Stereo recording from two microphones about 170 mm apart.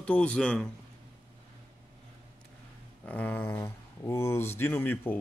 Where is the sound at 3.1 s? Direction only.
10° left (ahead or behind).